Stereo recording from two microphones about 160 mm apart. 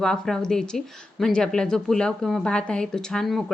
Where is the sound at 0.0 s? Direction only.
5° left (ahead or behind).